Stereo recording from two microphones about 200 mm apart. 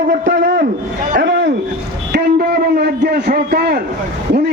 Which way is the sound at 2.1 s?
50° right (ahead or behind).